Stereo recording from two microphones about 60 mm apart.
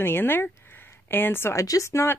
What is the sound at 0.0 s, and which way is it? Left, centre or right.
Speech, left.